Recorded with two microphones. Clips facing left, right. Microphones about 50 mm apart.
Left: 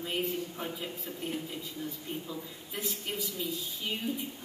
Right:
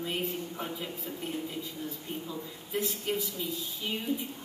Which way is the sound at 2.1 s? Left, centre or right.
Centre.